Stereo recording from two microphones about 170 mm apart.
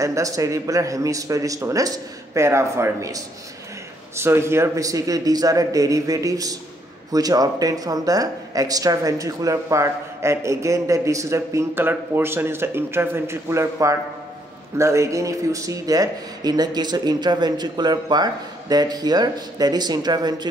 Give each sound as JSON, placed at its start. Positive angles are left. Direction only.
{"t": 0.0, "sound": "speech", "side_deg": -20}